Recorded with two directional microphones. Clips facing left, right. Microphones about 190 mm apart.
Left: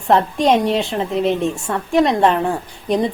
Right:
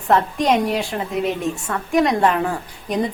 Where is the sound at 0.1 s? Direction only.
30° left (ahead or behind).